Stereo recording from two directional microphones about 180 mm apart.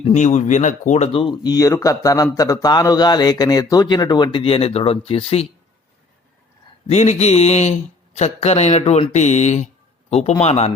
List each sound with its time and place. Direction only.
0.0 s speech: 40° left (ahead or behind)
6.8 s a man's voice: 40° left (ahead or behind)